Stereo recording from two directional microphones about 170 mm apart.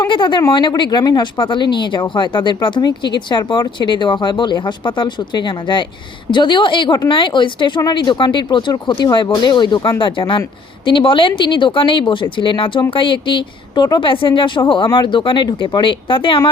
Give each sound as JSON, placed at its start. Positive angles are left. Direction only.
{"t": 0.0, "sound": "a woman's voice", "side_deg": 25}